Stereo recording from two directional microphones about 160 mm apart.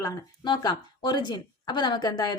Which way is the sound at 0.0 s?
25° left (ahead or behind).